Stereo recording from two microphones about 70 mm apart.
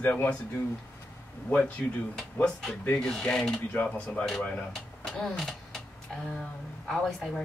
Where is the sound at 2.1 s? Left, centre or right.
Centre.